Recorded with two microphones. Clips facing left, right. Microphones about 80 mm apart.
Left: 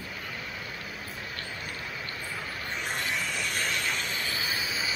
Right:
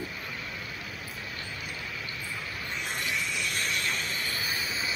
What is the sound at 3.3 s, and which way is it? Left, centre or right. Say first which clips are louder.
Vehicle: left 1 dB; left.